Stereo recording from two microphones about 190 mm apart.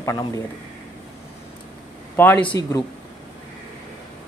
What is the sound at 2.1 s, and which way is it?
Speech, 10° left (ahead or behind).